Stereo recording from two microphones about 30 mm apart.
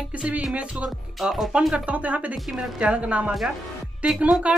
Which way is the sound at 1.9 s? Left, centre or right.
Right.